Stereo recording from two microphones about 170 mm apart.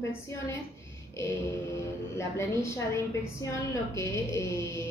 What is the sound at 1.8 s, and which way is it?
A woman's voice, 15° left (ahead or behind).